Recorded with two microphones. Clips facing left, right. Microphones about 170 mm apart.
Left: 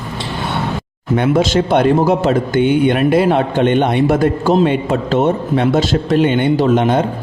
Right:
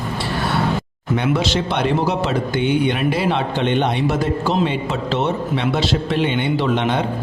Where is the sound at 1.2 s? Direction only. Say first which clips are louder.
Left 6 dB; 50° left (ahead or behind).